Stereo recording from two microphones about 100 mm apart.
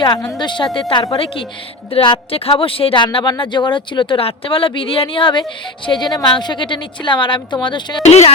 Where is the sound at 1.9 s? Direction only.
65° left (ahead or behind).